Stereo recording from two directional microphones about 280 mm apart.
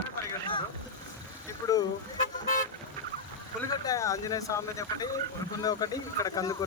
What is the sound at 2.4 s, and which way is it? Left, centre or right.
Vehicle, left.